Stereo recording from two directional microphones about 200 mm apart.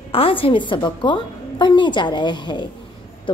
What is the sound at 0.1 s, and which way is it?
A woman's voice, 25° left (ahead or behind).